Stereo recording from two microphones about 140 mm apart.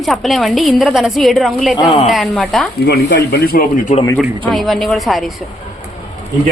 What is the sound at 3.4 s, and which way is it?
Speech, 90° left.